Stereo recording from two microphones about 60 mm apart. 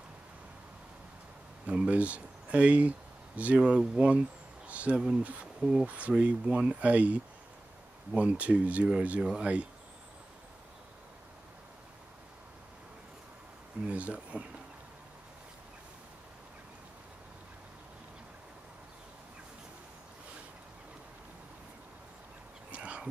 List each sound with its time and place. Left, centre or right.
1.7 s speech: right
5.9 s speech: right
13.8 s speech: right
22.7 s a sound: right